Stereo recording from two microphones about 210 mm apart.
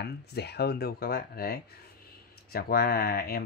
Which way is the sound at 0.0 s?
50° left (ahead or behind).